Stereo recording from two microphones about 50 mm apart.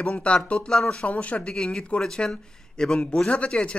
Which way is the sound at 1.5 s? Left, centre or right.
Centre.